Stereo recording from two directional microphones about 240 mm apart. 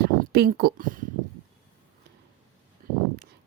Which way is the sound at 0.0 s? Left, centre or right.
Right.